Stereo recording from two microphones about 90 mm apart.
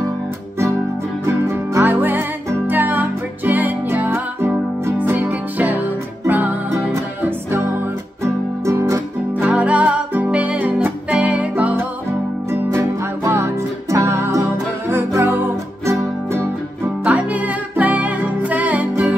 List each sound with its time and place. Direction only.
1.2 s music: 30° right (ahead or behind)
9.3 s music: 15° right (ahead or behind)
12.4 s music: 30° right (ahead or behind)
17.0 s music: 15° right (ahead or behind)